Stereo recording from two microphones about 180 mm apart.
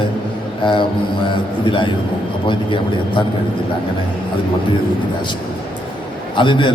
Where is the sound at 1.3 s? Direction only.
25° left (ahead or behind).